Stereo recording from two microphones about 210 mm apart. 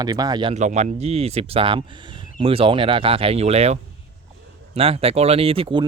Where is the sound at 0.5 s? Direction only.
35° right (ahead or behind).